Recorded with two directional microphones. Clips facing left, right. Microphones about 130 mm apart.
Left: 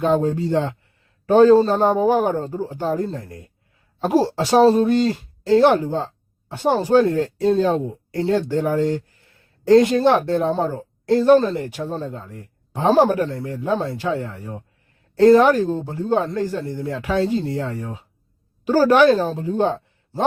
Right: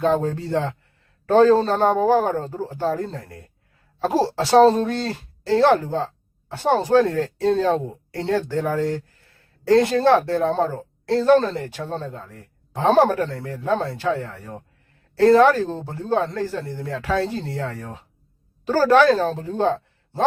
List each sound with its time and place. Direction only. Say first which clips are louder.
0.0 s speech: left 2 dB; 15° left (ahead or behind)